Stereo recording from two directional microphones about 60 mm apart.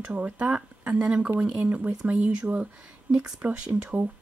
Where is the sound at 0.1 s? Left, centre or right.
Right.